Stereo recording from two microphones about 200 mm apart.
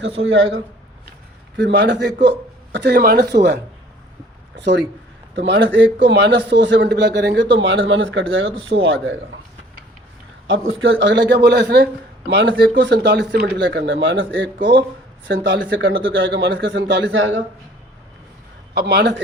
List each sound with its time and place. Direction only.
0.2 s a man's voice: 70° right (ahead or behind)
10.4 s a man's voice: 70° right (ahead or behind)
18.7 s a man's voice: 55° right (ahead or behind)